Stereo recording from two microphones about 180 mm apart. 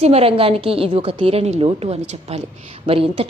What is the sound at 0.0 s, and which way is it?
A woman's voice, 35° right (ahead or behind).